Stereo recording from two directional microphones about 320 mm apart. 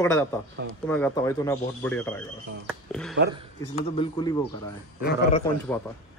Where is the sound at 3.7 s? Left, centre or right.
Centre.